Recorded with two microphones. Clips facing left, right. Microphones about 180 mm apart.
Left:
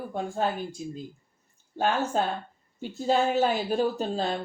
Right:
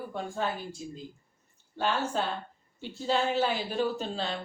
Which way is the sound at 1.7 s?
45° left (ahead or behind).